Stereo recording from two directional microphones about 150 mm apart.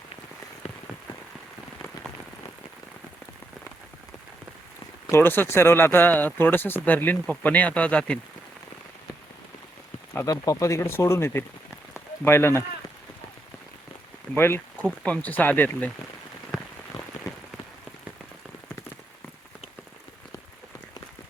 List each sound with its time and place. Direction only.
5.1 s speech: 15° left (ahead or behind)
10.1 s speech: 20° left (ahead or behind)
14.3 s speech: 15° left (ahead or behind)